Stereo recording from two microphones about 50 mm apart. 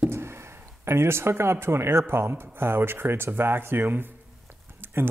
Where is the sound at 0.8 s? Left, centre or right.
Right.